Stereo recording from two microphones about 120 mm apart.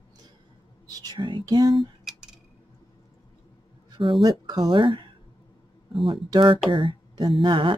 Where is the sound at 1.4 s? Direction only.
35° right (ahead or behind).